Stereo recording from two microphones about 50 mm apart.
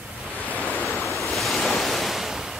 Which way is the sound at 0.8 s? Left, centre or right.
Centre.